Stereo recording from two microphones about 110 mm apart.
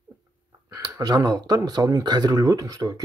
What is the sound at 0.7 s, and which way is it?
Speech, 35° right (ahead or behind).